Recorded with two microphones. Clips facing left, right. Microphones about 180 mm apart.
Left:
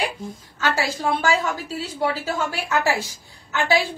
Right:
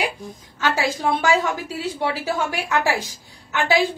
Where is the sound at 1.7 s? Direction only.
15° right (ahead or behind).